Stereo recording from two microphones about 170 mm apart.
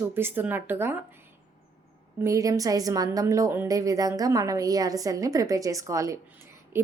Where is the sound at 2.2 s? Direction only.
20° right (ahead or behind).